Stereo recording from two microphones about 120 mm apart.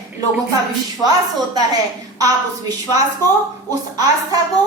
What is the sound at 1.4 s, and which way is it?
A woman's voice, 35° right (ahead or behind).